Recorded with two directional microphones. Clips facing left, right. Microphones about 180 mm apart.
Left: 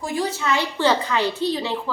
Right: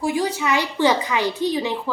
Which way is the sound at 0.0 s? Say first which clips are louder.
Right 3 dB; 15° right (ahead or behind).